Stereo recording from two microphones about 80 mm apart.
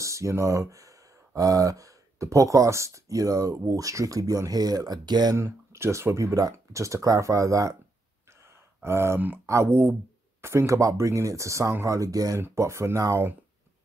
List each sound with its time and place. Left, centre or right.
0.0 s speech: right
5.3 s speech: right
8.8 s speech: right
12.4 s speech: right